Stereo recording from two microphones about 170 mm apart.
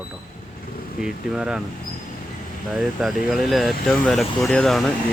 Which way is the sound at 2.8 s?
Centre (ahead or behind).